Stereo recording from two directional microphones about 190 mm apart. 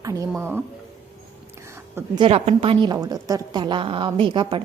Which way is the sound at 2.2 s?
30° right (ahead or behind).